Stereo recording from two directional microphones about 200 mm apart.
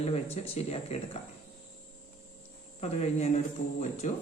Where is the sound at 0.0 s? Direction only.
30° left (ahead or behind).